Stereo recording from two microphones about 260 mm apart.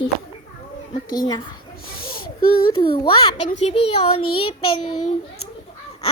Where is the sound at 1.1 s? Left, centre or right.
Centre.